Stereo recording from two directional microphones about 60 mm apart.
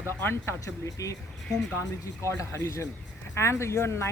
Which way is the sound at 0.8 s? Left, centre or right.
Left.